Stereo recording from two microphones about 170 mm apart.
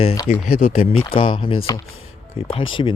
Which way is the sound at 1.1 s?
30° left (ahead or behind).